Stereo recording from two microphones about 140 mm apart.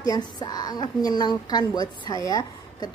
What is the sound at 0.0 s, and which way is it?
A woman's voice, 30° left (ahead or behind).